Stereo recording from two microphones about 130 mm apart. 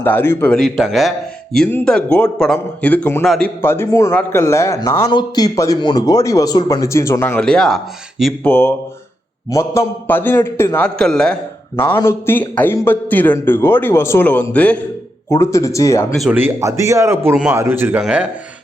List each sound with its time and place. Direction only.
0.0 s a man's voice: 15° left (ahead or behind)
0.5 s a man's voice: centre (ahead or behind)
3.2 s speech: 5° left (ahead or behind)
3.6 s a man's voice: 20° left (ahead or behind)
7.4 s speech: 5° left (ahead or behind)
8.4 s a man's voice: 15° left (ahead or behind)
10.8 s speech: 5° left (ahead or behind)
12.0 s a man's voice: 15° left (ahead or behind)
15.3 s speech: 25° left (ahead or behind)
16.3 s a man's voice: 20° right (ahead or behind)